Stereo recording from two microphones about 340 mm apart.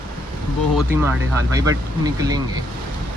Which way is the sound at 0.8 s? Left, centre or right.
Centre.